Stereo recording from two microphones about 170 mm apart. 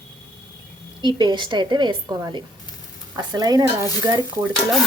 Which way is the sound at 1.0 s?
25° right (ahead or behind).